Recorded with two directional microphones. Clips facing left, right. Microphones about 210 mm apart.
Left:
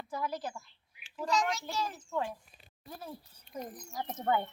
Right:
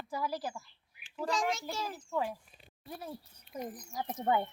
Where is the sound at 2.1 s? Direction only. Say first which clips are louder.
Right 3 dB; 10° right (ahead or behind).